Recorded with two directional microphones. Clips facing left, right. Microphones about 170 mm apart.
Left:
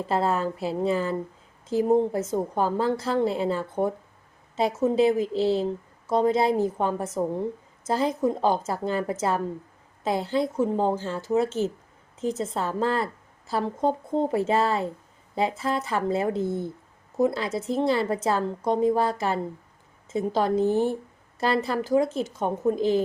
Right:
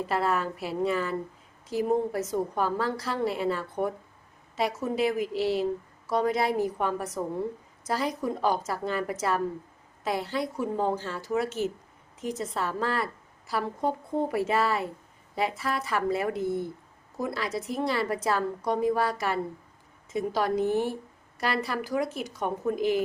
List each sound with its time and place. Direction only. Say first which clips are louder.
0.0 s a woman's voice: left 3 dB; 25° left (ahead or behind)